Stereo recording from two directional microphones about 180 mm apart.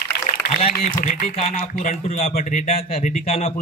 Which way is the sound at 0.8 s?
45° left (ahead or behind).